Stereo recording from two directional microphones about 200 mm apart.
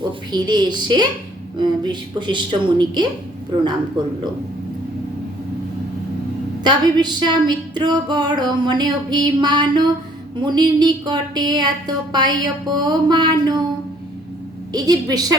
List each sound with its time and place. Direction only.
0.3 s speech: 20° right (ahead or behind)
6.7 s speech: 20° right (ahead or behind)
14.7 s speech: 20° right (ahead or behind)